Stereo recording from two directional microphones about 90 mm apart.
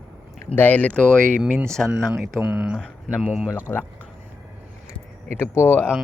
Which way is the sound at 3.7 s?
20° left (ahead or behind).